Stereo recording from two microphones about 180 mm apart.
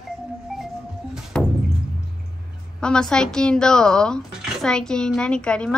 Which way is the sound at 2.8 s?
5° left (ahead or behind).